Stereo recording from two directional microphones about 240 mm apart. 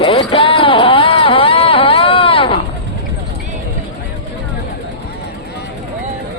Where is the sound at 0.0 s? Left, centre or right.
Left.